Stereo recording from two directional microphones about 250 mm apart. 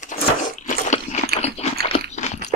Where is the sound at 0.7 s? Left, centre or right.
Left.